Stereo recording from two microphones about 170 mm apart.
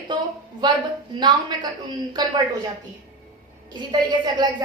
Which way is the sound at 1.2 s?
25° right (ahead or behind).